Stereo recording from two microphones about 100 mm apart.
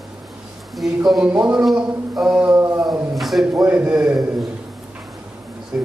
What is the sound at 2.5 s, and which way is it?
Howl, 25° right (ahead or behind).